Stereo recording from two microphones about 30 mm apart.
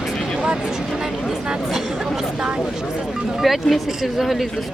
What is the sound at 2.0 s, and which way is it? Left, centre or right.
Speech, centre.